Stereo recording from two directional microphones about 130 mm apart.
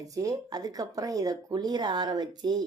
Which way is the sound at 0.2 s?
30° right (ahead or behind).